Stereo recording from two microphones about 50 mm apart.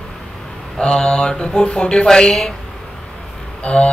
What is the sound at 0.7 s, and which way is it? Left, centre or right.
Mantra, centre.